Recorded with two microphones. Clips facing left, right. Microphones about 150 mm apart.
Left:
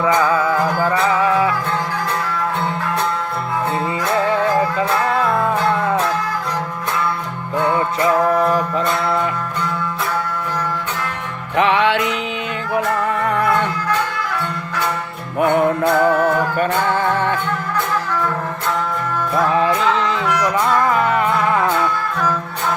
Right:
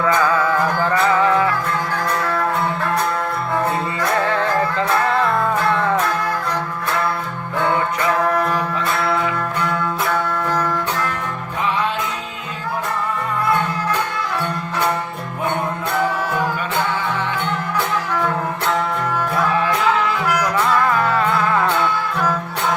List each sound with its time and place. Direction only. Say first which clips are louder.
0.8 s music: even; 10° left (ahead or behind)
8.4 s music: left 3 dB; 30° left (ahead or behind)
11.5 s music: left 7 dB; 75° left (ahead or behind)
15.4 s music: left 8 dB; 65° left (ahead or behind)
16.6 s music: left 4 dB; 50° left (ahead or behind)
20.2 s music: left 1 dB; 5° right (ahead or behind)
20.9 s music: left 1 dB; 20° left (ahead or behind)